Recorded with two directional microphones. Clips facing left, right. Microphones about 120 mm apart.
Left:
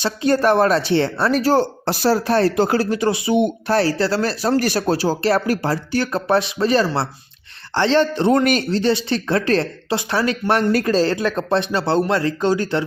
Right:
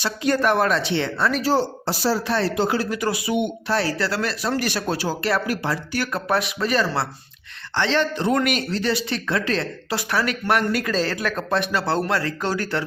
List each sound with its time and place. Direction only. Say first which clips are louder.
0.0 s speech: left 4 dB; 30° left (ahead or behind)
1.8 s speech: left 5 dB; 60° left (ahead or behind)
2.2 s speech: left 5 dB; 45° left (ahead or behind)
2.9 s speech: left 5 dB; 25° left (ahead or behind)